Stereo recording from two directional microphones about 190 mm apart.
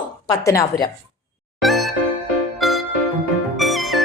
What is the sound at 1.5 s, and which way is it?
Music, centre (ahead or behind).